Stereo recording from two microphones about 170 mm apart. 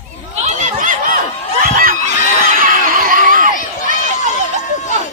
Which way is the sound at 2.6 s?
55° right (ahead or behind).